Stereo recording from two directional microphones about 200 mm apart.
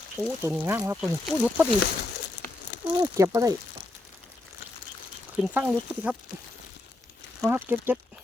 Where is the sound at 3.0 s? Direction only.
15° right (ahead or behind).